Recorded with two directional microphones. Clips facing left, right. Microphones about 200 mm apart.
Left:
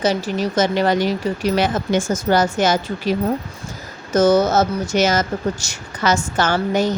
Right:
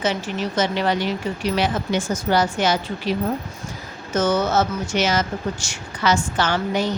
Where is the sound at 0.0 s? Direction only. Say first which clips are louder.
Left 4 dB; 40° left (ahead or behind).